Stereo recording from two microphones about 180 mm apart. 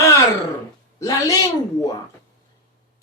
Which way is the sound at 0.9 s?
20° left (ahead or behind).